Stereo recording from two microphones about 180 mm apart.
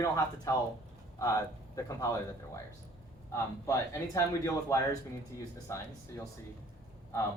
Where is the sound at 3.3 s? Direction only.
15° left (ahead or behind).